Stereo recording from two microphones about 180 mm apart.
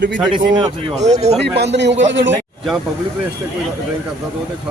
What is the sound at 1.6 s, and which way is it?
Speech, 75° right (ahead or behind).